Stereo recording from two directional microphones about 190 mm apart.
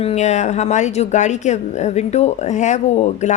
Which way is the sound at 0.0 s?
35° left (ahead or behind).